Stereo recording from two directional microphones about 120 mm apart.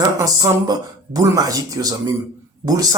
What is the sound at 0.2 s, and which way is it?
Speech, 30° right (ahead or behind).